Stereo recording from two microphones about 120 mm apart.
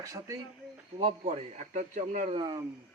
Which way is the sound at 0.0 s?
30° right (ahead or behind).